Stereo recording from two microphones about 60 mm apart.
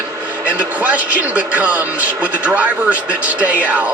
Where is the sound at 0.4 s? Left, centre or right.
Right.